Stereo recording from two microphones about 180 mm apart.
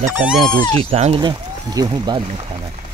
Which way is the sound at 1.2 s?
25° right (ahead or behind).